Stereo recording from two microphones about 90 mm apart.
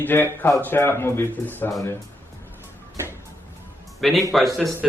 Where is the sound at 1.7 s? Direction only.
35° left (ahead or behind).